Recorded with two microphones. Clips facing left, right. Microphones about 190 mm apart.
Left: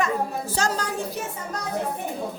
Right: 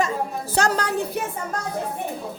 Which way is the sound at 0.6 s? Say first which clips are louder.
Right 5 dB; 65° right (ahead or behind).